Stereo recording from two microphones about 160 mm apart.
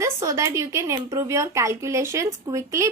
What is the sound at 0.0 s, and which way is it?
A woman's voice, 20° right (ahead or behind).